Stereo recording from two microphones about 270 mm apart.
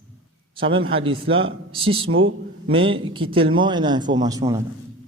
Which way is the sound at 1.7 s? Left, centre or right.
Centre.